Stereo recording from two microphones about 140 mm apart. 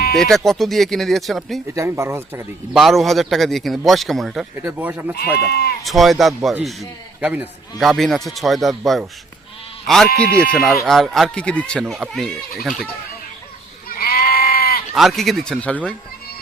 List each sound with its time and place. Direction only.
0.2 s a man's voice: centre (ahead or behind)
1.6 s speech: 20° right (ahead or behind)
2.7 s a man's voice: centre (ahead or behind)
4.5 s speech: 15° right (ahead or behind)
5.1 s speech: 90° left
5.8 s a man's voice: centre (ahead or behind)
13.8 s goat: 90° left
14.9 s a man's voice: centre (ahead or behind)